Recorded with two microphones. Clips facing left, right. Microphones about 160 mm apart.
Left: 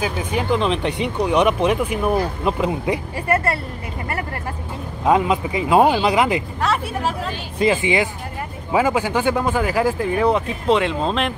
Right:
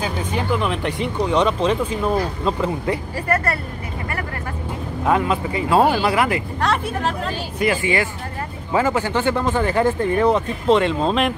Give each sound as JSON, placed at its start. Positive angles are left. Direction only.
{"t": 0.0, "sound": "speech", "side_deg": 10}
{"t": 5.0, "sound": "speech", "side_deg": 20}
{"t": 6.6, "sound": "speech", "side_deg": 5}
{"t": 7.5, "sound": "speech", "side_deg": 20}